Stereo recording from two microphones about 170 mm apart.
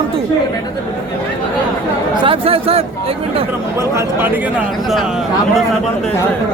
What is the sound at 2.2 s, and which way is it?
Speech, 30° right (ahead or behind).